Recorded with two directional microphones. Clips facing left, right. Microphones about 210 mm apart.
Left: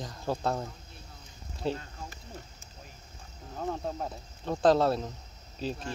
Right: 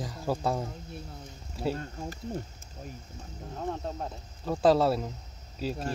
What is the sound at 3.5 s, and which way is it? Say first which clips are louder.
Speech: left 1 dB; centre (ahead or behind).